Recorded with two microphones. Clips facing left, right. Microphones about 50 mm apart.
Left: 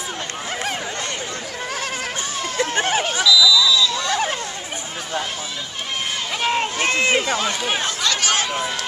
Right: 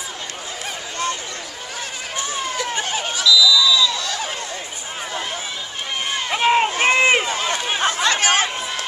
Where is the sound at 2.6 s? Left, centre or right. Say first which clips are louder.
Left 8 dB; left.